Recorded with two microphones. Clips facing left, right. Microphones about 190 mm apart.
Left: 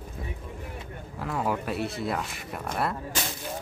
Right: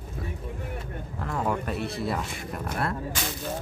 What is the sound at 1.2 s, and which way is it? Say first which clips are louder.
Speech: even; 5° left (ahead or behind).